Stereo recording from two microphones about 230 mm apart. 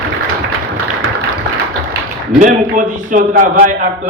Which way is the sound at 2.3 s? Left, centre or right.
Right.